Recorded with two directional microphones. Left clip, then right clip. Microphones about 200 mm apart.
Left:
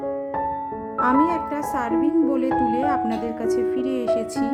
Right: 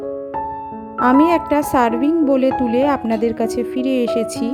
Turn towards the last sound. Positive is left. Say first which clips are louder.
# right 3 dB
turn(degrees=-25)  # may be behind; listen again after turning